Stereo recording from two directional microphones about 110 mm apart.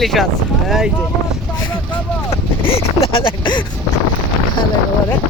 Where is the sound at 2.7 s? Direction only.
60° left (ahead or behind).